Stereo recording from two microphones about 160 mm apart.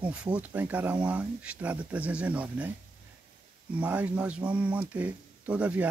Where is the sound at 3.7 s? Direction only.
10° right (ahead or behind).